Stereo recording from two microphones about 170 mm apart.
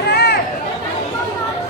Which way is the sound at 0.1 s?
70° left (ahead or behind).